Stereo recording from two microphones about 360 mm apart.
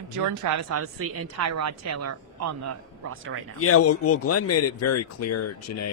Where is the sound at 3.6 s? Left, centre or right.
Left.